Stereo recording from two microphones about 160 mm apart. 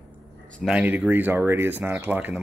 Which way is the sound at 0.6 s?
5° right (ahead or behind).